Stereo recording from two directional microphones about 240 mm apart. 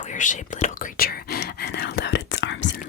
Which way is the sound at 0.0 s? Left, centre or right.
Left.